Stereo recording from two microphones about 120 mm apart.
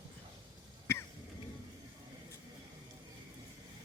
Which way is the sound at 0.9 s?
20° left (ahead or behind).